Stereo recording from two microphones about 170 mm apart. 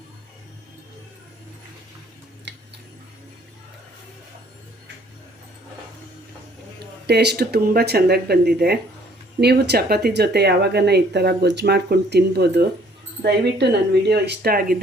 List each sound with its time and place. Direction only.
7.1 s speech: 75° right (ahead or behind)